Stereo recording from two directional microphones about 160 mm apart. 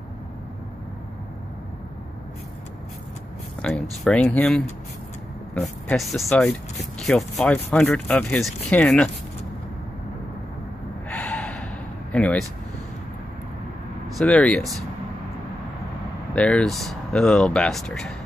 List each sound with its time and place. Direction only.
3.6 s speech: 5° left (ahead or behind)
11.1 s gasp: 10° left (ahead or behind)
12.1 s speech: 5° left (ahead or behind)
14.1 s speech: 5° left (ahead or behind)
16.3 s speech: 5° left (ahead or behind)